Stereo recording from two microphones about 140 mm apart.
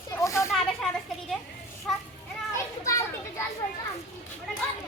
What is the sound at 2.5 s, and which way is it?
Children playing, 20° left (ahead or behind).